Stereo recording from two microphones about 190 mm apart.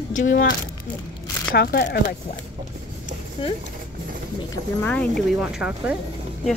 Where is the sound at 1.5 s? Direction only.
55° left (ahead or behind).